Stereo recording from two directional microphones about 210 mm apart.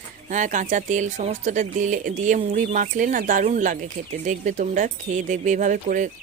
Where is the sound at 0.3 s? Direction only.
35° right (ahead or behind).